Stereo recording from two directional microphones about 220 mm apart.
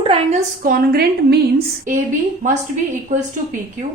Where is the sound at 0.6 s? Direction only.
45° right (ahead or behind).